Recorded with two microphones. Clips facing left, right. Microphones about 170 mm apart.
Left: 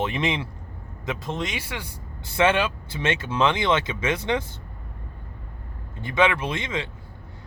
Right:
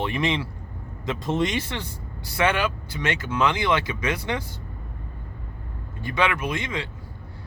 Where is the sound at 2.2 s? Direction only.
25° left (ahead or behind).